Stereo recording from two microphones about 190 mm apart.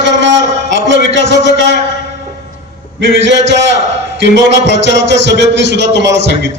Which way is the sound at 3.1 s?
70° right (ahead or behind).